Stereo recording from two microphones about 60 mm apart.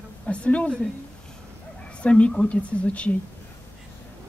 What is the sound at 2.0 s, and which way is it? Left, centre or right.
A woman's voice, centre.